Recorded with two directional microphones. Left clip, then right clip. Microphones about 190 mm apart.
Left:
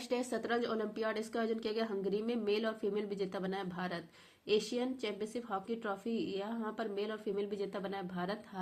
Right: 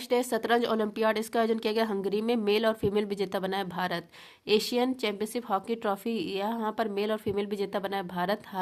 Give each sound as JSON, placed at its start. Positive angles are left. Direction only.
{"t": 0.1, "sound": "a woman's voice", "side_deg": -40}